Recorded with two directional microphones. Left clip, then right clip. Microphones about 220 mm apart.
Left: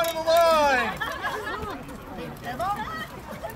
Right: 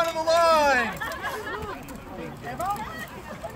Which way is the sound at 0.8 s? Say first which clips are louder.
Left 2 dB; 50° left (ahead or behind).